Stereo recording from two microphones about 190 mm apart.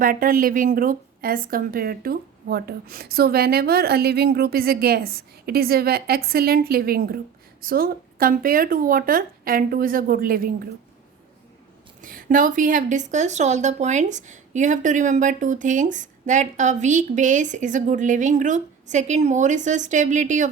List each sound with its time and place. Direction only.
0.0 s a woman's voice: 50° right (ahead or behind)
12.0 s speech: 45° right (ahead or behind)